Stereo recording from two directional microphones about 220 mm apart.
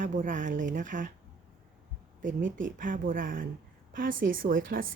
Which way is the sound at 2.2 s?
35° right (ahead or behind).